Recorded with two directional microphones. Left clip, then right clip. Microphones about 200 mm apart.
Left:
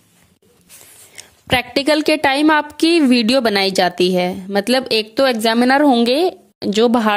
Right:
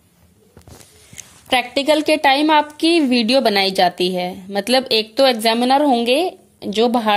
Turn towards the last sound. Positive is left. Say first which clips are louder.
# left 2 dB
turn(degrees=35)  # may be behind; listen again after turning